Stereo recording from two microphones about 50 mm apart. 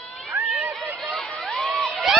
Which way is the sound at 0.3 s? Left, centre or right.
Right.